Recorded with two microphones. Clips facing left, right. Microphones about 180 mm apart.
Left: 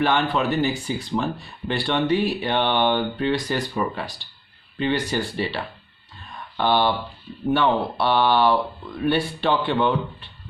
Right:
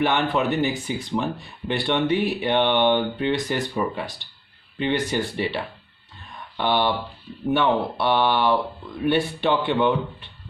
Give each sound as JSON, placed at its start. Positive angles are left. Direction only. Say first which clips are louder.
{"t": 0.0, "sound": "speech", "louder": "even", "side_deg": -20}
{"t": 6.6, "sound": "speech", "louder": "left 2 dB", "side_deg": -20}
{"t": 7.9, "sound": "speech", "louder": "left 1 dB", "side_deg": -20}